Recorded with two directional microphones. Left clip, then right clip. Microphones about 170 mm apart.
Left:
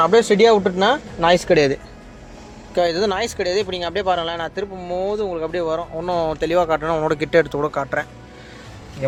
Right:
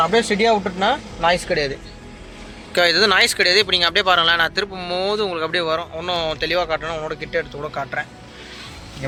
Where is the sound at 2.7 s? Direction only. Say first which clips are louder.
Right 4 dB; 25° left (ahead or behind).